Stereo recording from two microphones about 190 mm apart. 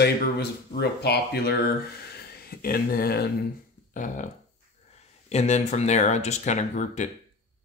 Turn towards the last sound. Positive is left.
turn(degrees=40)  # may be behind; listen again after turning